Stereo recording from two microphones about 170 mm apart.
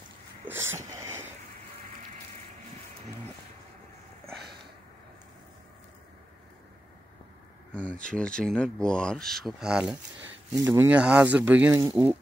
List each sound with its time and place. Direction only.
0.5 s wheeze: 15° right (ahead or behind)
7.7 s speech: 5° left (ahead or behind)
10.5 s speech: 20° right (ahead or behind)